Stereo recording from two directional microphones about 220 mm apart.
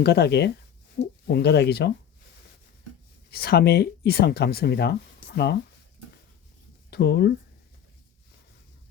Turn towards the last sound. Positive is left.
turn(degrees=45)  # may be behind; listen again after turning